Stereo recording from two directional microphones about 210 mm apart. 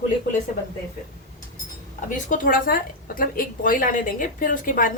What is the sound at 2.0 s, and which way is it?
A woman's voice, 40° left (ahead or behind).